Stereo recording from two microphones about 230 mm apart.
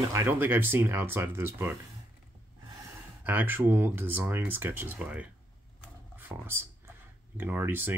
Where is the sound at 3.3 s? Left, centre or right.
Centre.